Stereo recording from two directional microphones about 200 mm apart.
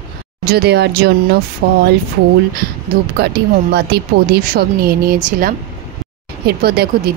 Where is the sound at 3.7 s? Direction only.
55° right (ahead or behind).